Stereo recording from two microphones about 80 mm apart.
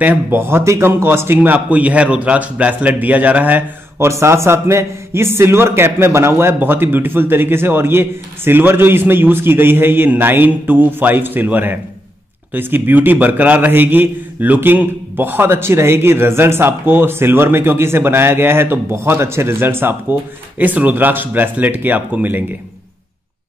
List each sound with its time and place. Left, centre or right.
0.0 s a man's voice: right
4.1 s a man's voice: right